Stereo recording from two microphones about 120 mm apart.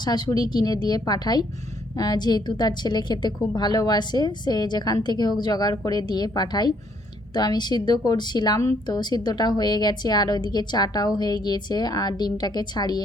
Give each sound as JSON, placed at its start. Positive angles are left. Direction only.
{"t": 0.0, "sound": "a woman's voice", "side_deg": 35}